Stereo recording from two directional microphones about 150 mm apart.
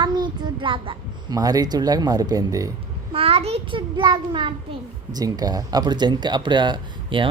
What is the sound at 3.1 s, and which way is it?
Speech, 40° right (ahead or behind).